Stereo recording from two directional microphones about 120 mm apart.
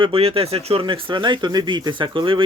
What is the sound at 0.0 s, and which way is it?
Speech, 55° right (ahead or behind).